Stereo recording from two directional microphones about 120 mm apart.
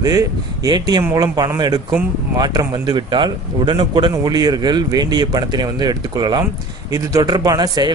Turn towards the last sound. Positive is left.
turn(degrees=-35)  # may be behind; listen again after turning